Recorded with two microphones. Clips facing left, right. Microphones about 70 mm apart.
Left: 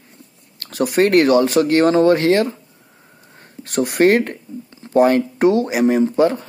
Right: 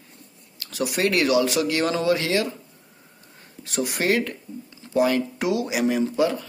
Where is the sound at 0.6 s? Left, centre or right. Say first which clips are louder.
Left 8 dB; left.